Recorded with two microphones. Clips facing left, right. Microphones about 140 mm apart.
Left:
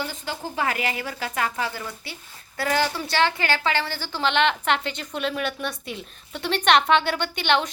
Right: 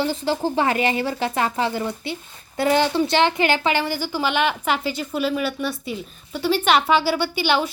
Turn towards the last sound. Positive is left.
turn(degrees=-5)  # may be behind; listen again after turning